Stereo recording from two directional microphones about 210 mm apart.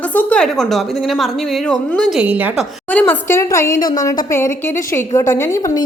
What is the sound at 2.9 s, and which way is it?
Speech, 10° left (ahead or behind).